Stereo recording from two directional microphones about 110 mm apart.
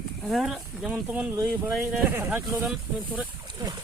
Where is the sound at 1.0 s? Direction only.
15° right (ahead or behind).